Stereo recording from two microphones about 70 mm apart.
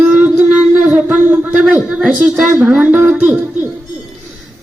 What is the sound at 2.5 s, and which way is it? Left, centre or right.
Speech, right.